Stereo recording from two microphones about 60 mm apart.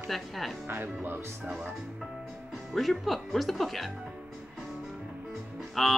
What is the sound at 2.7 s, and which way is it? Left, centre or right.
Speech, centre.